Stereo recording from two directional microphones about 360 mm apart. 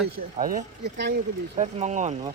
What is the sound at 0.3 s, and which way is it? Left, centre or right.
Speech, right.